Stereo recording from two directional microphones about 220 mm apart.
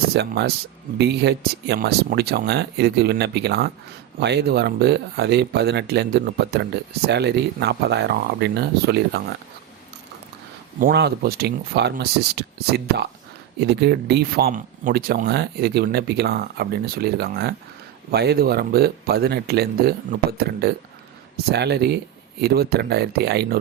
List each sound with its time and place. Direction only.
0.1 s speech: 50° right (ahead or behind)
10.8 s speech: 45° right (ahead or behind)